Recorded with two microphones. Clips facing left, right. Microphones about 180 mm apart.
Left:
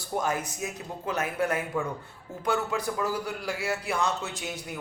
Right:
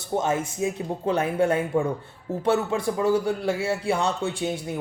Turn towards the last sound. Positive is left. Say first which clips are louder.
# right 8 dB
turn(degrees=-30)  # may be behind; listen again after turning